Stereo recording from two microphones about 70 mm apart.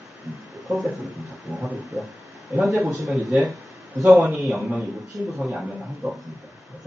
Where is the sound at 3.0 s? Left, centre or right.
Centre.